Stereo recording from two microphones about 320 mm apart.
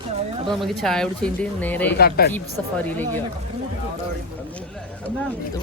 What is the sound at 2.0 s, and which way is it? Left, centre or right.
Speech, left.